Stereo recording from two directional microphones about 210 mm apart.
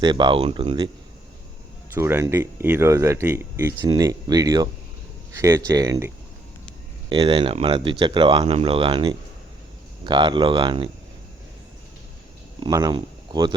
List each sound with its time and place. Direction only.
0.0 s speech: 20° right (ahead or behind)
1.9 s speech: 10° right (ahead or behind)
7.1 s speech: 25° right (ahead or behind)
12.5 s speech: 20° right (ahead or behind)